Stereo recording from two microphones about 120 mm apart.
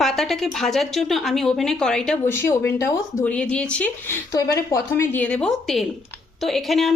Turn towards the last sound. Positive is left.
turn(degrees=0)  # may be behind; listen again after turning